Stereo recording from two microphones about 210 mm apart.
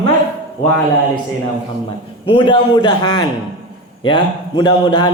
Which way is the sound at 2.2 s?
25° left (ahead or behind).